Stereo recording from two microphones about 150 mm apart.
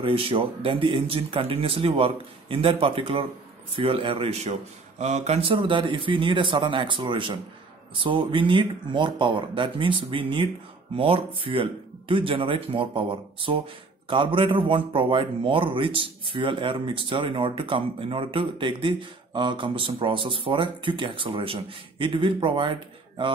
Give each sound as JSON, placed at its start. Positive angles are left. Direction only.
{"t": 0.0, "sound": "a man's voice", "side_deg": -35}